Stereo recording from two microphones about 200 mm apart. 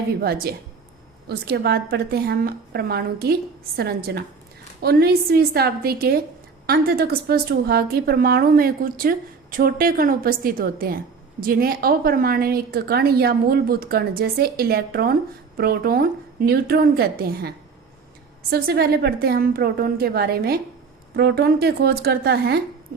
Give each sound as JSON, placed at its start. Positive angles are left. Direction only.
{"t": 0.2, "sound": "a woman's voice", "side_deg": -50}
{"t": 18.5, "sound": "a woman's voice", "side_deg": -50}